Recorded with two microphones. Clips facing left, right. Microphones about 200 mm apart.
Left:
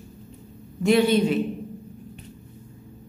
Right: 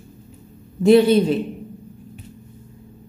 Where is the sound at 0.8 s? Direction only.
35° right (ahead or behind).